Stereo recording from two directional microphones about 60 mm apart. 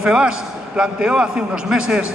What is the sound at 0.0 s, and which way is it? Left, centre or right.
A man's voice, centre.